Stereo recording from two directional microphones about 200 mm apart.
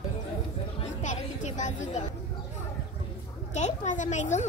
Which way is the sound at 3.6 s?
35° left (ahead or behind).